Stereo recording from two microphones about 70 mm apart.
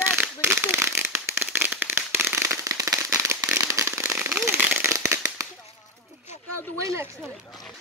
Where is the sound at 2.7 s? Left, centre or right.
Right.